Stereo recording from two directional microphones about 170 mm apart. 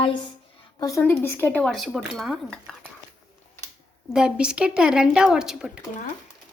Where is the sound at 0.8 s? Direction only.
20° left (ahead or behind); by 2.7 s centre (ahead or behind).